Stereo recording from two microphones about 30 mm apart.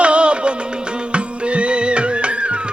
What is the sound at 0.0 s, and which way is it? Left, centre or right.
Music, right.